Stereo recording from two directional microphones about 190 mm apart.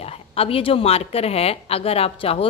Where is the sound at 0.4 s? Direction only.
30° left (ahead or behind).